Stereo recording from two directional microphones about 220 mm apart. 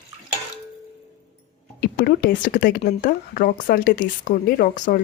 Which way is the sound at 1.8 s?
45° left (ahead or behind).